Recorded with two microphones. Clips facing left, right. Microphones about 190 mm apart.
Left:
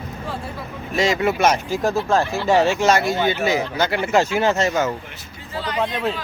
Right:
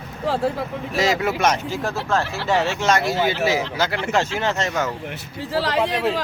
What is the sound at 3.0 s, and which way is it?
Speech, 5° right (ahead or behind).